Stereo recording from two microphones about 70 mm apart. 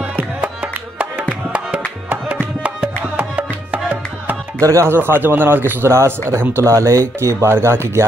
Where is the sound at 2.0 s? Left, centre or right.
Right.